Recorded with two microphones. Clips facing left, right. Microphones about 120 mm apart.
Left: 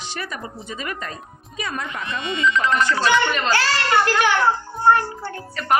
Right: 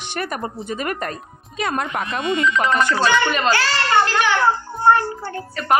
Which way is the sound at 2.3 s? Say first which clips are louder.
Right 1 dB; 60° right (ahead or behind).